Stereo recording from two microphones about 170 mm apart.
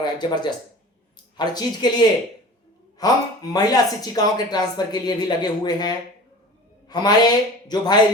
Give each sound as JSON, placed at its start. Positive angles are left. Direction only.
{"t": 0.0, "sound": "speech", "side_deg": 25}